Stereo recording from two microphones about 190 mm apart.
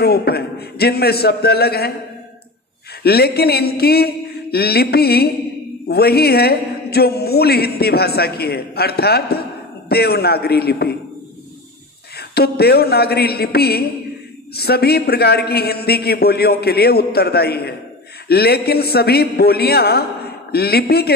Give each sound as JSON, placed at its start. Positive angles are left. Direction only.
{"t": 0.0, "sound": "speech", "side_deg": 55}
{"t": 3.0, "sound": "speech", "side_deg": 55}
{"t": 12.2, "sound": "speech", "side_deg": 55}